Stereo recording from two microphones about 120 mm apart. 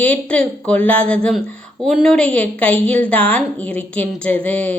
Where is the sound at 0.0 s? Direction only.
10° left (ahead or behind).